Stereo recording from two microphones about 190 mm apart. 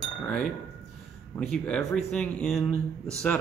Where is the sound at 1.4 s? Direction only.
Centre (ahead or behind).